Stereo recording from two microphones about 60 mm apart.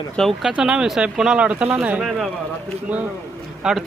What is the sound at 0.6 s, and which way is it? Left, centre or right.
Speech, centre.